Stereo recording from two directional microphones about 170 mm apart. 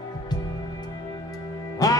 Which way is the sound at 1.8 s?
20° left (ahead or behind).